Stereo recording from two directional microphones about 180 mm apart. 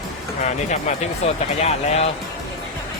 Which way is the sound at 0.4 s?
40° left (ahead or behind).